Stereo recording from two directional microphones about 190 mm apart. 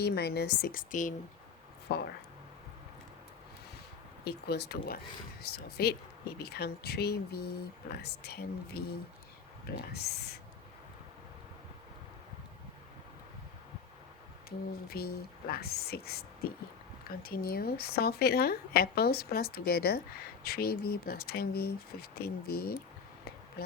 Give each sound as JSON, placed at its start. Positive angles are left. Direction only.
{"t": 0.0, "sound": "speech", "side_deg": 60}
{"t": 1.9, "sound": "speech", "side_deg": 60}
{"t": 4.2, "sound": "speech", "side_deg": 60}
{"t": 14.8, "sound": "speech", "side_deg": 55}